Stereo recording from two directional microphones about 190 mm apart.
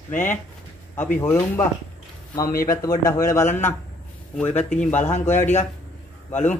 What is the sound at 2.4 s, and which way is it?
Speech, 50° left (ahead or behind).